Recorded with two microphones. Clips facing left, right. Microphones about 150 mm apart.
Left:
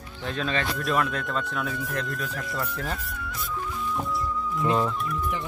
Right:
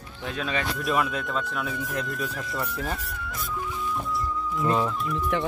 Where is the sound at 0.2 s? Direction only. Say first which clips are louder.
Left 1 dB; 5° right (ahead or behind).